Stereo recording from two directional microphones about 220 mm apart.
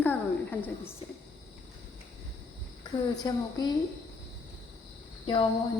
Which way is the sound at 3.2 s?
20° left (ahead or behind).